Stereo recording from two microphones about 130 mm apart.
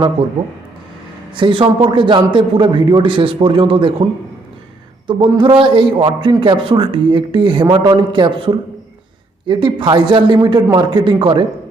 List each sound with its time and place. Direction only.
1.4 s a man's voice: 40° right (ahead or behind)
5.0 s a man's voice: 40° right (ahead or behind)